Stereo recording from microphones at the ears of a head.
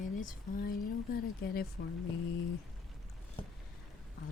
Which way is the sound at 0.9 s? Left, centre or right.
Left.